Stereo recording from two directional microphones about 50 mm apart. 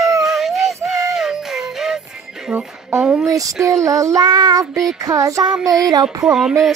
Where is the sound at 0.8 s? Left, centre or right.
Centre.